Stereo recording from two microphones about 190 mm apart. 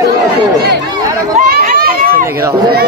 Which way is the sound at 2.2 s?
15° right (ahead or behind).